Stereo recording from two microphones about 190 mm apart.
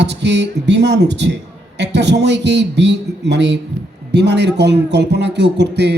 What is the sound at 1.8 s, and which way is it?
Speech, 65° right (ahead or behind).